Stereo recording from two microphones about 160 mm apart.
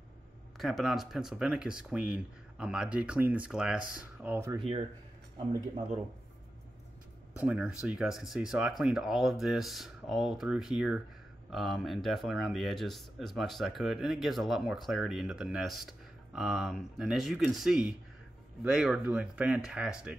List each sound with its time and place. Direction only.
0.6 s speech: centre (ahead or behind)
4.6 s speech: 40° right (ahead or behind)
7.3 s speech: 10° right (ahead or behind)